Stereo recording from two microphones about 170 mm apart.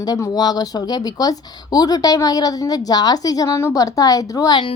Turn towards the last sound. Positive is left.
turn(degrees=25)  # may be behind; listen again after turning